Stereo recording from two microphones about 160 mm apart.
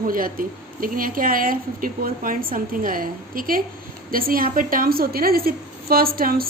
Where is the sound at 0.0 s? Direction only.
60° right (ahead or behind).